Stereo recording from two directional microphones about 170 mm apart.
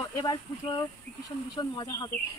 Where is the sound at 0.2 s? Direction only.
20° left (ahead or behind).